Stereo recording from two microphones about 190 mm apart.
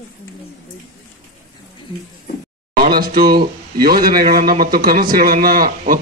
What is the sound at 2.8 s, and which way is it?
A man's voice, 50° right (ahead or behind).